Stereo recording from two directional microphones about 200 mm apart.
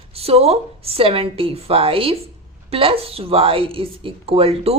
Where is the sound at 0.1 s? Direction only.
30° right (ahead or behind).